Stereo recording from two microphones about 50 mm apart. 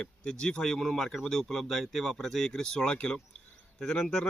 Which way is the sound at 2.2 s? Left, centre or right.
Centre.